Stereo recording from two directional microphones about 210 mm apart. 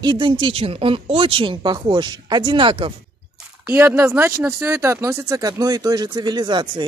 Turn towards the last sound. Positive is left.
turn(degrees=-20)  # may be behind; listen again after turning